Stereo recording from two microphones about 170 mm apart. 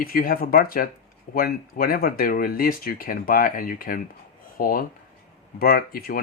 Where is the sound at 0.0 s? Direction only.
60° left (ahead or behind).